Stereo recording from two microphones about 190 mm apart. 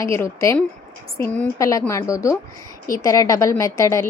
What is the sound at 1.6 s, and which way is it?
A woman's voice, 15° left (ahead or behind).